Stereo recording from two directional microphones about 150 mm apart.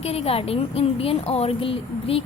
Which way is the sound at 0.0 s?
45° left (ahead or behind).